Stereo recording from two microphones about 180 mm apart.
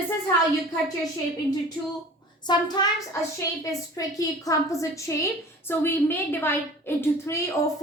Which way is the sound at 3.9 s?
20° left (ahead or behind).